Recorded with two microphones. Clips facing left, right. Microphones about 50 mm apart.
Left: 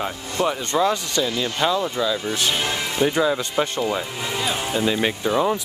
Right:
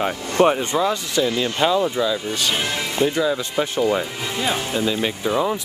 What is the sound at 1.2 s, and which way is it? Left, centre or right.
Speech, centre.